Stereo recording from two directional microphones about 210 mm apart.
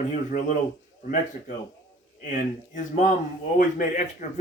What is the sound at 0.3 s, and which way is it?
Speech, 40° left (ahead or behind).